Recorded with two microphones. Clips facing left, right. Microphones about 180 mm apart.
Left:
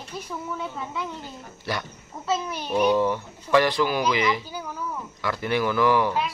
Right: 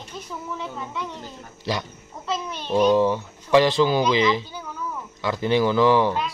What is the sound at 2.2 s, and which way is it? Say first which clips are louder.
Speech: left 1 dB; 5° left (ahead or behind).